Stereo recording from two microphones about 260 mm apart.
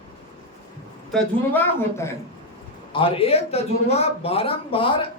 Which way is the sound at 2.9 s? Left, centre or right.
Left.